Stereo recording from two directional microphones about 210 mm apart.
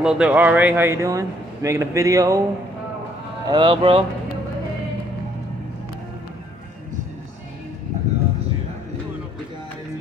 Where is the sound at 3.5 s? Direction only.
20° right (ahead or behind).